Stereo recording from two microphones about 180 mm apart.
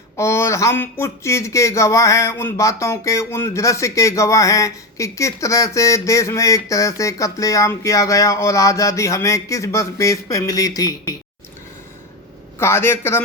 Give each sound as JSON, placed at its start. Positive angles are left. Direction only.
{"t": 0.2, "sound": "speech", "side_deg": 15}
{"t": 12.5, "sound": "speech", "side_deg": 15}